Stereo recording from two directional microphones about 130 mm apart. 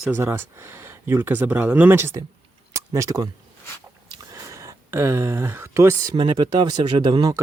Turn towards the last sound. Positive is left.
turn(degrees=-35)  # may be behind; listen again after turning